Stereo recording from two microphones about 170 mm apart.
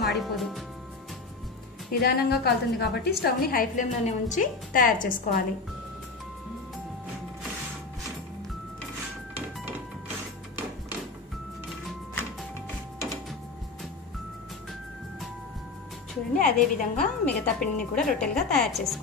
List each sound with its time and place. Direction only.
0.0 s speech: centre (ahead or behind)
1.9 s a woman's voice: 65° left (ahead or behind)
16.3 s a woman's voice: 50° left (ahead or behind)
17.2 s speech: 5° left (ahead or behind)